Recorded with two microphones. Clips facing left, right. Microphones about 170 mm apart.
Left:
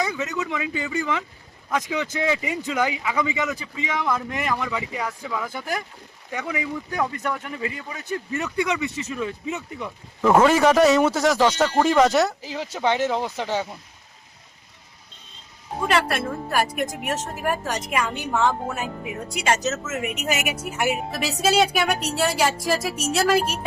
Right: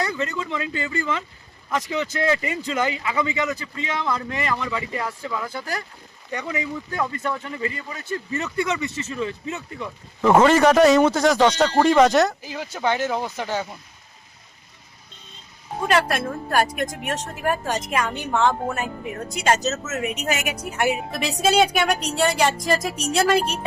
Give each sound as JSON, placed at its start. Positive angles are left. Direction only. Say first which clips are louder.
{"t": 0.1, "sound": "a man's voice", "louder": "even", "side_deg": 10}
{"t": 5.5, "sound": "a man's voice", "louder": "left 1 dB", "side_deg": 15}
{"t": 10.2, "sound": "speech", "louder": "right 1 dB", "side_deg": -5}
{"t": 10.4, "sound": "a woman's voice", "louder": "right 2 dB", "side_deg": 5}
{"t": 16.5, "sound": "a woman's voice", "louder": "right 3 dB", "side_deg": 5}